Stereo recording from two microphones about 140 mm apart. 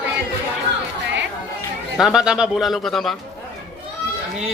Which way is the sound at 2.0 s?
5° right (ahead or behind).